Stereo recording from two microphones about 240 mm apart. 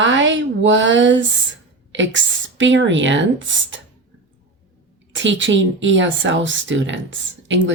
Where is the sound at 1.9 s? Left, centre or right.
Right.